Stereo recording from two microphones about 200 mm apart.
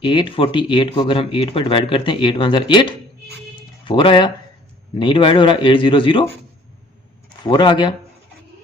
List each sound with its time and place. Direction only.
0.0 s speech: 25° left (ahead or behind)
7.4 s speech: 20° left (ahead or behind)